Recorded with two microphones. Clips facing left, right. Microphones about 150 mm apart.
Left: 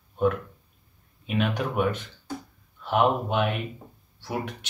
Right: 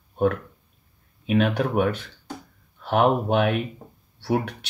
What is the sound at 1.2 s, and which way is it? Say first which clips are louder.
Speech: right 5 dB; 50° right (ahead or behind).